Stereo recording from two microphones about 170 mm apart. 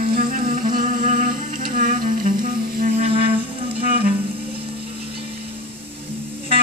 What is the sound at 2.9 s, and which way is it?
Music, 35° right (ahead or behind).